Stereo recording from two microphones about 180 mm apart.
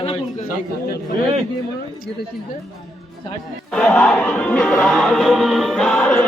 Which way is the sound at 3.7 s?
5° left (ahead or behind).